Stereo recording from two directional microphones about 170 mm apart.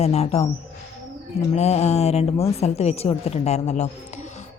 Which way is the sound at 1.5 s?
40° left (ahead or behind).